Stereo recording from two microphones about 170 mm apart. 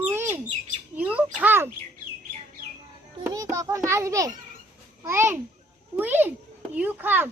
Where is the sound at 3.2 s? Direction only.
20° right (ahead or behind).